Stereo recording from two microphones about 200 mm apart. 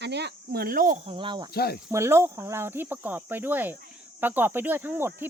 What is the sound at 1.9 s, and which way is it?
Speech, 15° right (ahead or behind).